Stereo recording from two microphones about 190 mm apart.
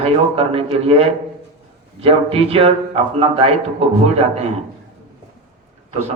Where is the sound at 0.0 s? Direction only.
30° right (ahead or behind).